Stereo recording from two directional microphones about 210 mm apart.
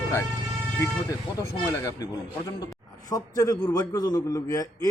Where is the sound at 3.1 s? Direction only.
15° left (ahead or behind).